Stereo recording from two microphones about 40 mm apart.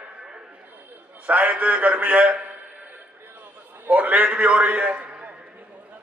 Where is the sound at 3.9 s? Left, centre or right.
Right.